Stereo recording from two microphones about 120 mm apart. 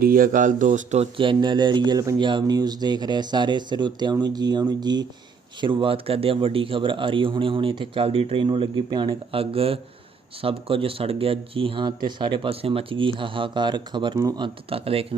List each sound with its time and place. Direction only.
0.3 s a man's voice: 90° right
1.1 s speech: 45° right (ahead or behind)
14.2 s speech: 30° right (ahead or behind)
14.4 s speech: 50° right (ahead or behind)